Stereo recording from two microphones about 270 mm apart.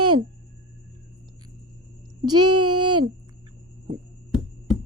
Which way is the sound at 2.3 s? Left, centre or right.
Right.